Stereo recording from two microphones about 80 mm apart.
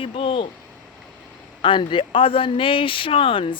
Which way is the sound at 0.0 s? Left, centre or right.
Left.